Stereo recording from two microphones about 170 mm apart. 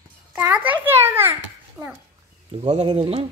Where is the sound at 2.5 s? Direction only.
40° right (ahead or behind).